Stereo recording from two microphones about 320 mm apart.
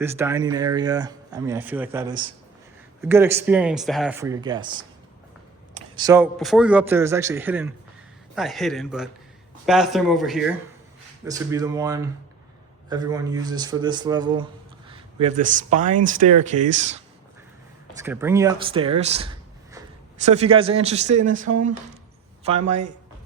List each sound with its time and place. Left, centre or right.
0.0 s speech: centre
17.9 s speech: centre
21.5 s speech: right
22.4 s speech: right